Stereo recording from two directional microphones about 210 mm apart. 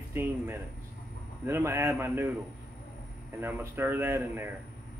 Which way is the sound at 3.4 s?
10° right (ahead or behind).